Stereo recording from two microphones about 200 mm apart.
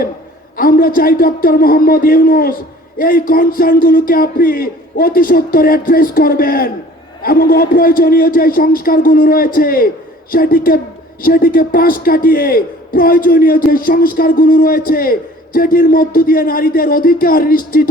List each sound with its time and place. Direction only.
0.5 s a man's voice: 45° left (ahead or behind)